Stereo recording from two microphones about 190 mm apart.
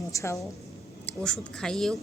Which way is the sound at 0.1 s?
15° left (ahead or behind).